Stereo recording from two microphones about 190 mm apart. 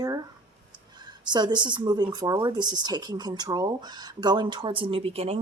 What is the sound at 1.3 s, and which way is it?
Speech, 25° right (ahead or behind).